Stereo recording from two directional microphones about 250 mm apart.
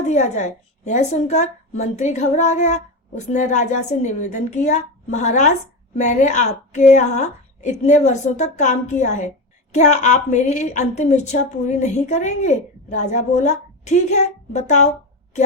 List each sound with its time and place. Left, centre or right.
0.1 s speech: left